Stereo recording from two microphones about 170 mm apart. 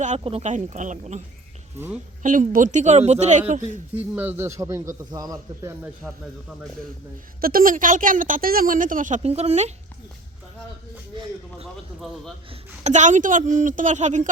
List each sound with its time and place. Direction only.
0.0 s speech: 40° right (ahead or behind)
2.2 s speech: 50° right (ahead or behind)
3.9 s a man's voice: 10° right (ahead or behind)
7.4 s speech: 55° right (ahead or behind); by 9.7 s 40° right (ahead or behind)
11.6 s speech: centre (ahead or behind)
12.5 s speech: 40° right (ahead or behind)